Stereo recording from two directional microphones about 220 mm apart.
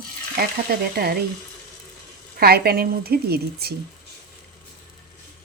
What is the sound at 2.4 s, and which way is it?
A woman's voice, 45° right (ahead or behind).